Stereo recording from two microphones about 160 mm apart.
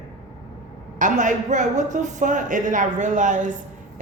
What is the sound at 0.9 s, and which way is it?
A woman's voice, 55° right (ahead or behind).